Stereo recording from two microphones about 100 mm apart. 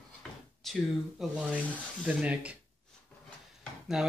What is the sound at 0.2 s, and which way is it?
Drawer open or close, 10° left (ahead or behind).